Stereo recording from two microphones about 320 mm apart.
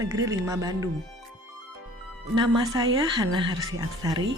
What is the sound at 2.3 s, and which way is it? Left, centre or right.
Speech, centre.